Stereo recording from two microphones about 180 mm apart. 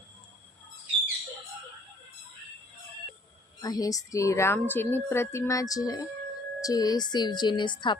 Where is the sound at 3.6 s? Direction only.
20° left (ahead or behind).